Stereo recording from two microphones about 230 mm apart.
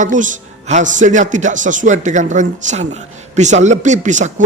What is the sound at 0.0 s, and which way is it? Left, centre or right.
A man's voice, right.